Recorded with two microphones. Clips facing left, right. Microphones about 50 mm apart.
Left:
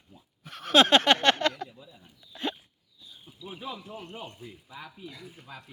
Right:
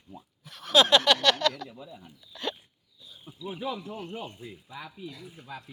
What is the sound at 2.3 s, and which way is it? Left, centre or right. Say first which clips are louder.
Hiccup: left 1 dB; left.